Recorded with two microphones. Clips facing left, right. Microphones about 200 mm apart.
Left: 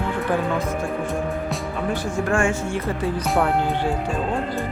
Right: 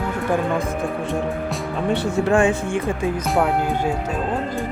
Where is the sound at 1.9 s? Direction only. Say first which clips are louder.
Right 4 dB; 65° right (ahead or behind).